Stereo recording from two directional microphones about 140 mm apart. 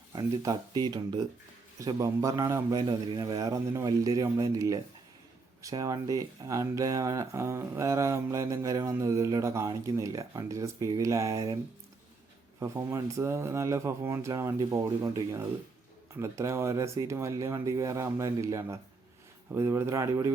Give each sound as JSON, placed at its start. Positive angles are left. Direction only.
{"t": 0.1, "sound": "speech", "side_deg": -30}
{"t": 12.5, "sound": "speech", "side_deg": -20}